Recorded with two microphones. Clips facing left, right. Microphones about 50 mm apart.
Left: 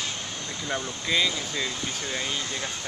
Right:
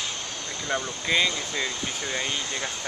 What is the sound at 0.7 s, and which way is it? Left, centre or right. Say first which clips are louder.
Speech: right 2 dB; centre.